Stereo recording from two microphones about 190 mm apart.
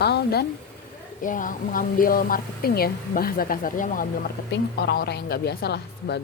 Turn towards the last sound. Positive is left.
turn(degrees=60)  # may be behind; listen again after turning